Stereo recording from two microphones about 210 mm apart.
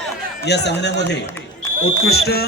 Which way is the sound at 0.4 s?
55° left (ahead or behind).